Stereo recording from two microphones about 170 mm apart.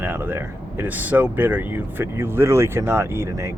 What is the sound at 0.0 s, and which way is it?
Speech, 15° right (ahead or behind).